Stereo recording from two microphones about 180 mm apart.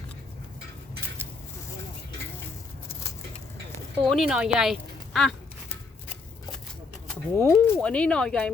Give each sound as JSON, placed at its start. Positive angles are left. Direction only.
{"t": 4.1, "sound": "speech", "side_deg": -5}
{"t": 7.1, "sound": "speech", "side_deg": 10}